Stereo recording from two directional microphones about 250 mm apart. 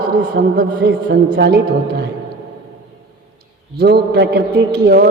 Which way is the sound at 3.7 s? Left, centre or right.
Right.